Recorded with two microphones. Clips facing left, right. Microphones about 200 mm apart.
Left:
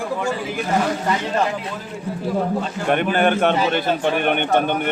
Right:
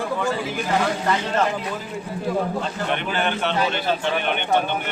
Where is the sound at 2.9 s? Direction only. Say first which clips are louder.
Left 9 dB; 50° left (ahead or behind).